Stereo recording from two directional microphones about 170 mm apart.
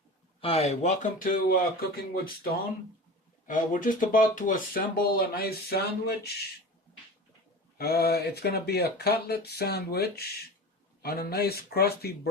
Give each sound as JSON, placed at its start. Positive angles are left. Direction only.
{"t": 0.4, "sound": "speech", "side_deg": 35}
{"t": 7.8, "sound": "speech", "side_deg": 65}